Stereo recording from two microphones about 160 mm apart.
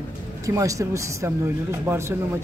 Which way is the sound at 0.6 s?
20° right (ahead or behind).